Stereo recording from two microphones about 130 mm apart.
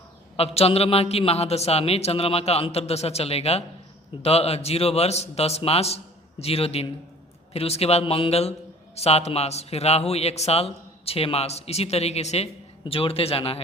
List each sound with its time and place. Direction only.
0.3 s a man's voice: 50° left (ahead or behind)